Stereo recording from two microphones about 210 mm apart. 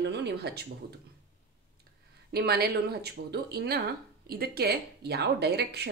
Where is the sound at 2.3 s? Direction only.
50° right (ahead or behind).